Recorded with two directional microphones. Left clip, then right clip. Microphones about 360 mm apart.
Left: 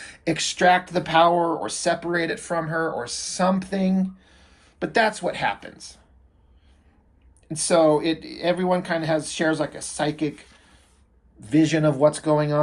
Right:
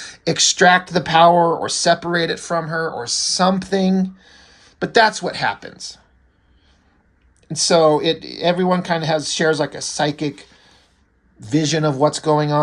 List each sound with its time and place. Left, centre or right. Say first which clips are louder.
0.0 s a sound: right 8 dB; centre
0.9 s speech: right 6 dB; right
7.4 s speech: right 4 dB; centre
11.3 s speech: right 1 dB; centre